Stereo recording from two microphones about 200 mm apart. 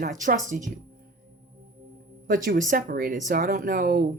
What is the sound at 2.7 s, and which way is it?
Speech, 45° right (ahead or behind).